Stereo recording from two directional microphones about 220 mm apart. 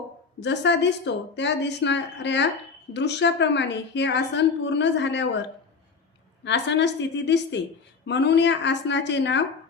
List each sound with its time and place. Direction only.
0.3 s a woman's voice: 55° left (ahead or behind)